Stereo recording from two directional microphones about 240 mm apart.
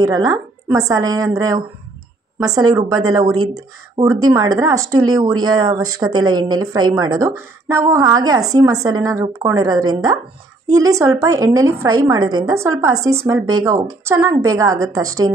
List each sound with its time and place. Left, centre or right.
0.0 s speech: centre